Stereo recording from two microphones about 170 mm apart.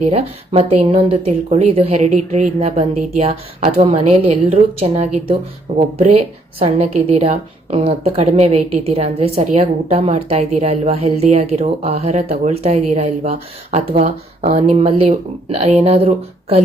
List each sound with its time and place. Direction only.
0.0 s a woman's voice: 35° right (ahead or behind)